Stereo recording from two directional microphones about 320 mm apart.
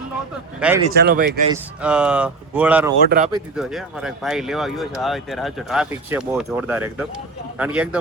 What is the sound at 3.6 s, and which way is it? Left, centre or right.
Speech, centre.